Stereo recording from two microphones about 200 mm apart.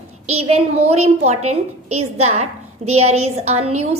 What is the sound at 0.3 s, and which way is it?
A woman's voice, 30° right (ahead or behind).